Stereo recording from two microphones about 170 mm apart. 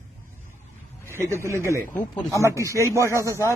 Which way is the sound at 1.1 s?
15° right (ahead or behind).